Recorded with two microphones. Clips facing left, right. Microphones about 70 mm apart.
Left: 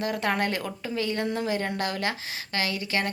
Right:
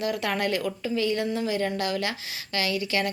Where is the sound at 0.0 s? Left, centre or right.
Left.